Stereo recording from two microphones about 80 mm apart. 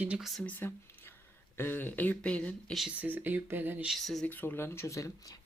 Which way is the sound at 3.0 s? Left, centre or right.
Right.